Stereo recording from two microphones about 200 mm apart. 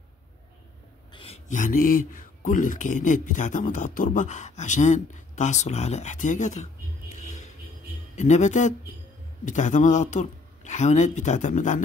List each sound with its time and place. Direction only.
1.1 s a man's voice: 30° left (ahead or behind)
7.2 s music: 35° left (ahead or behind)
8.2 s a man's voice: 35° left (ahead or behind)